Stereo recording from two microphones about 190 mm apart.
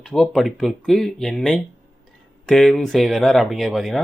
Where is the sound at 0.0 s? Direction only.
5° left (ahead or behind).